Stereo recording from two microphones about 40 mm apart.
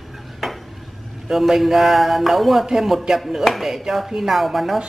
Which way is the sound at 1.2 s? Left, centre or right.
Centre.